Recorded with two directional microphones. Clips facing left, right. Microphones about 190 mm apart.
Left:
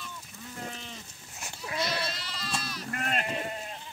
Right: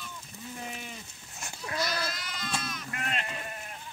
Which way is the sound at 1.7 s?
25° left (ahead or behind).